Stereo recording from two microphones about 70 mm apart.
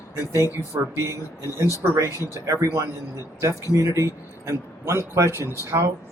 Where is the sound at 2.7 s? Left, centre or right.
Right.